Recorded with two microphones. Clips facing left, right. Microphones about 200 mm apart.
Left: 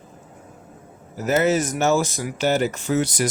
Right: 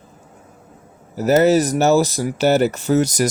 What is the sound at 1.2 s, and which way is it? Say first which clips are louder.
Speech: right 6 dB; 35° right (ahead or behind).